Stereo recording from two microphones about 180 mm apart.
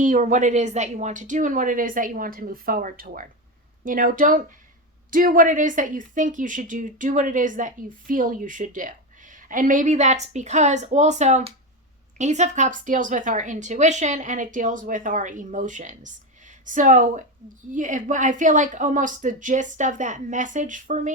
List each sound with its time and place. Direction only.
0.0 s speech: 45° right (ahead or behind)